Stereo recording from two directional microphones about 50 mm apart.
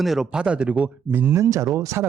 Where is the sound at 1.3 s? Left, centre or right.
Right.